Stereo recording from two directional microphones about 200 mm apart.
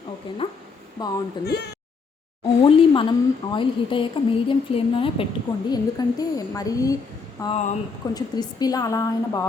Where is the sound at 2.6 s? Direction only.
25° left (ahead or behind).